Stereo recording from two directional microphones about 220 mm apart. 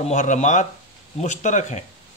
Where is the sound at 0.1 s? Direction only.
35° left (ahead or behind).